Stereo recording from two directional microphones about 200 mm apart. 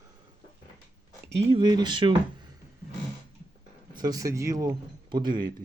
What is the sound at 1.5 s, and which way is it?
Speech, 25° right (ahead or behind).